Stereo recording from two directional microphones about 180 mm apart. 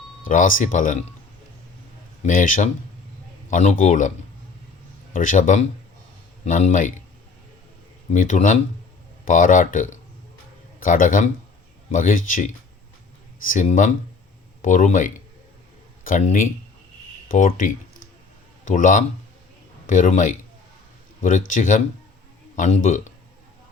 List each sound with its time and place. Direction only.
0.3 s speech: 45° left (ahead or behind)
2.2 s speech: 45° left (ahead or behind)
5.1 s speech: 45° left (ahead or behind)
8.1 s a man's voice: 45° left (ahead or behind)